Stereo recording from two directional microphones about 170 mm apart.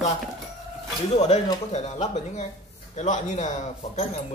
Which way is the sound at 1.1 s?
40° left (ahead or behind).